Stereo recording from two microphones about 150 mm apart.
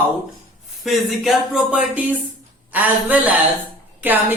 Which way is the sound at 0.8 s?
Centre (ahead or behind).